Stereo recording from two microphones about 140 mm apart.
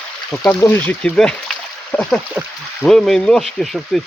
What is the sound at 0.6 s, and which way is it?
Speech, 15° left (ahead or behind).